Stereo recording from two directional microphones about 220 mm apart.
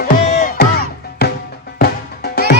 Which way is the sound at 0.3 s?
30° left (ahead or behind).